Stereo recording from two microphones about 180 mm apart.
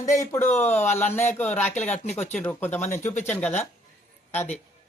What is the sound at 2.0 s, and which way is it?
Speech, 40° left (ahead or behind).